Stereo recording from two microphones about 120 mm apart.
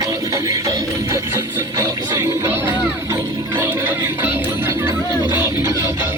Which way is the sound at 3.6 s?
20° right (ahead or behind).